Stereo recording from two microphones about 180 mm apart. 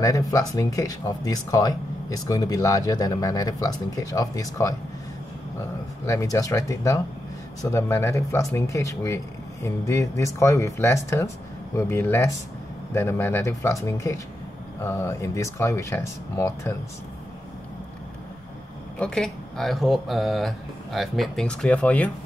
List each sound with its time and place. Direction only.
0.0 s speech: 20° left (ahead or behind)
6.0 s speech: 15° left (ahead or behind)
18.9 s speech: 5° left (ahead or behind)